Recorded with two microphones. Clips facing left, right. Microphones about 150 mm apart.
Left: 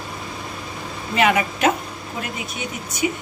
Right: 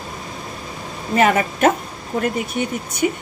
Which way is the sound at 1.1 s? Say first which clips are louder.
Right 3 dB; 45° right (ahead or behind).